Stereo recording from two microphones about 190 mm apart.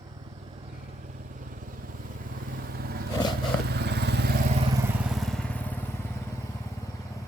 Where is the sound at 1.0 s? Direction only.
45° right (ahead or behind).